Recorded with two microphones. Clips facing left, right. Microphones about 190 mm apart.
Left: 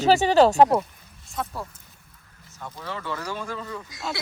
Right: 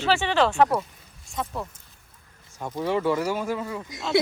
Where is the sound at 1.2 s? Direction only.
Centre (ahead or behind).